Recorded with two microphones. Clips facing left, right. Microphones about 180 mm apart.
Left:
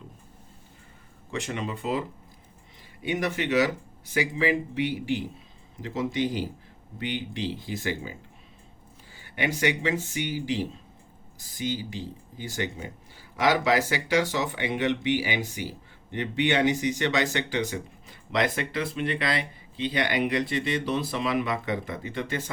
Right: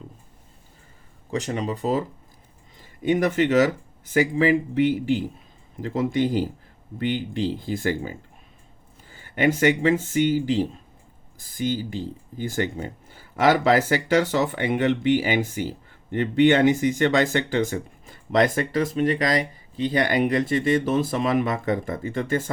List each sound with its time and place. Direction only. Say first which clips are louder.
1.3 s speech: right 5 dB; 35° right (ahead or behind)